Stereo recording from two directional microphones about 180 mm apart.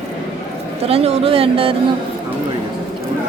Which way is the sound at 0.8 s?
35° right (ahead or behind).